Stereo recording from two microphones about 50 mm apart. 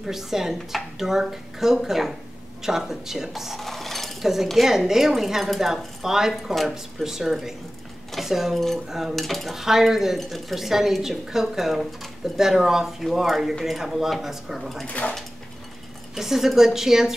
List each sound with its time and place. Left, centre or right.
0.0 s speech: centre
6.3 s speech: centre
14.9 s speech: left
16.2 s speech: centre